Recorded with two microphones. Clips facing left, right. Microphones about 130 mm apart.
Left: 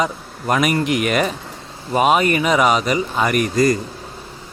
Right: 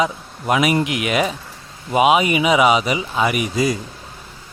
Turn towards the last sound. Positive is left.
turn(degrees=-5)  # may be behind; listen again after turning